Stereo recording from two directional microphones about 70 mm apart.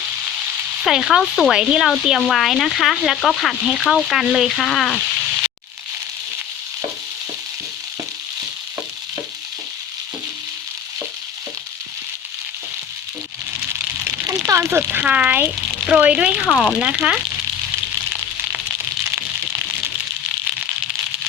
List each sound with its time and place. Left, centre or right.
0.9 s speech: centre
2.0 s speech: centre
14.3 s a sound: right
14.7 s speech: right
15.0 s speech: right
16.5 s speech: centre
16.7 s speech: centre